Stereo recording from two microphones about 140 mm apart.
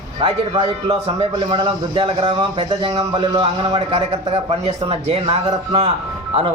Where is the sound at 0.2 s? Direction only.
35° right (ahead or behind).